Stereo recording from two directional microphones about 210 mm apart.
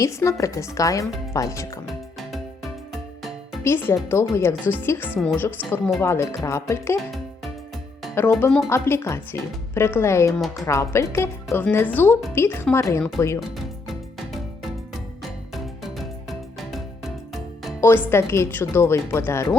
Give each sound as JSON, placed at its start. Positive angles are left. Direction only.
{"t": 0.0, "sound": "speech", "side_deg": 15}
{"t": 1.9, "sound": "music", "side_deg": 0}
{"t": 3.6, "sound": "a woman's voice", "side_deg": 10}
{"t": 8.1, "sound": "speech", "side_deg": 10}
{"t": 15.2, "sound": "music", "side_deg": 0}
{"t": 17.7, "sound": "speech", "side_deg": 10}